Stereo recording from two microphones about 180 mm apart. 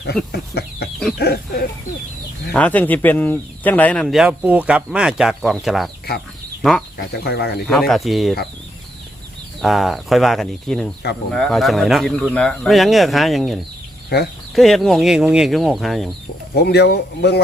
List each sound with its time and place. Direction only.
0.3 s chicken: 65° left (ahead or behind)
1.2 s a sound: 60° left (ahead or behind)
2.5 s speech: 10° left (ahead or behind)
7.0 s speech: 65° left (ahead or behind)
7.7 s speech: centre (ahead or behind)
9.6 s speech: centre (ahead or behind)
14.1 s speech: 65° left (ahead or behind)
14.5 s speech: centre (ahead or behind)
16.6 s speech: 65° left (ahead or behind)